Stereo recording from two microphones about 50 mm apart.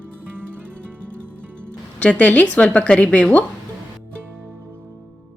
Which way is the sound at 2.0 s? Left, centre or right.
Left.